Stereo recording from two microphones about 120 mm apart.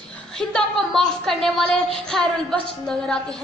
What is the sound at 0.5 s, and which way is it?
A woman's voice, 5° left (ahead or behind).